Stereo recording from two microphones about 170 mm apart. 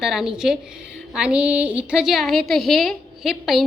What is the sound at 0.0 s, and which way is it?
A woman's voice, 5° right (ahead or behind).